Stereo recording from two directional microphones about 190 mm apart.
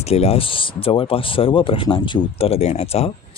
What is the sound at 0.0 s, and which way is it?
Speech, 30° left (ahead or behind).